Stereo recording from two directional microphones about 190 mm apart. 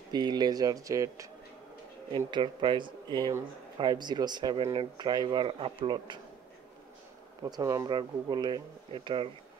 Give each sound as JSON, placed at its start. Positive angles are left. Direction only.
{"t": 0.1, "sound": "speech", "side_deg": -20}
{"t": 7.4, "sound": "speech", "side_deg": -20}